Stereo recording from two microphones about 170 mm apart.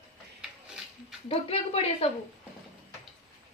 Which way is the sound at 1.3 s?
35° left (ahead or behind).